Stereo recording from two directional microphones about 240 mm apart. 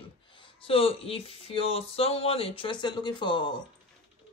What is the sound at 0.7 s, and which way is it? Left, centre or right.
Speech, left.